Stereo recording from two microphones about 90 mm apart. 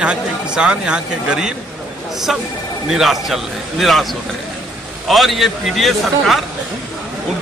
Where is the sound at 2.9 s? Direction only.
5° right (ahead or behind).